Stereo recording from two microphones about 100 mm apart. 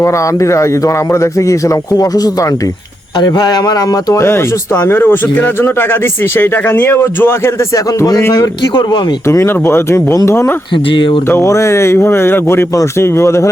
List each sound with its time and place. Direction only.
0.0 s speech: 30° left (ahead or behind)
4.2 s speech: 25° left (ahead or behind)
9.2 s speech: 30° left (ahead or behind)
10.8 s speech: 60° left (ahead or behind)
11.3 s speech: 30° left (ahead or behind)